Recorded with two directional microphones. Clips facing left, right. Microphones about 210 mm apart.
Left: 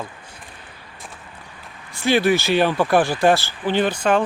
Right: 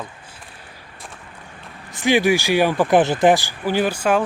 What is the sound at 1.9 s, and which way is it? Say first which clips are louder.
Speech: right 1 dB; 15° right (ahead or behind).